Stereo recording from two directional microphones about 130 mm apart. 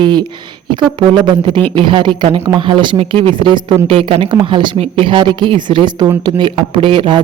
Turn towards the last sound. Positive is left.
turn(degrees=-35)  # may be behind; listen again after turning